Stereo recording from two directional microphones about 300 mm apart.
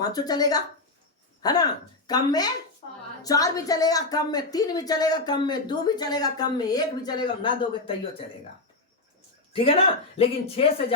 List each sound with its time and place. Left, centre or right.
0.0 s speech: centre
9.5 s speech: centre